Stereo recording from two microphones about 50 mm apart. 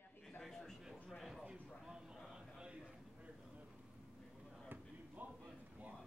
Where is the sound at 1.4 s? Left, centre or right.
Centre.